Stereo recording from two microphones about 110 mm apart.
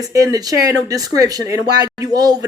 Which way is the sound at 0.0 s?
30° right (ahead or behind).